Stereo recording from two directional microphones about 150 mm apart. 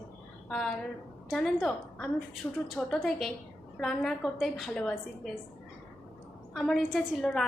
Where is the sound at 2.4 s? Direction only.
10° left (ahead or behind).